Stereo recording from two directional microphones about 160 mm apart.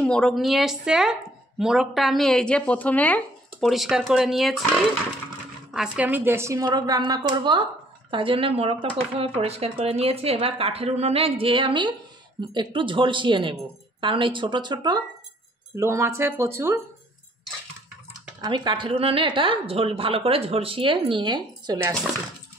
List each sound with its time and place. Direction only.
0.0 s speech: 5° left (ahead or behind)
3.6 s a woman's voice: centre (ahead or behind)
18.4 s a woman's voice: 30° right (ahead or behind)